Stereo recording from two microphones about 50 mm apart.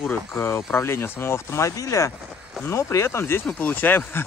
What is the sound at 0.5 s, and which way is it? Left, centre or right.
Speech, left.